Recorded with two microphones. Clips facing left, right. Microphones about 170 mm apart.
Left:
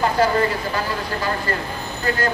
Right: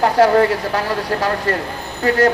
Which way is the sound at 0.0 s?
75° right (ahead or behind).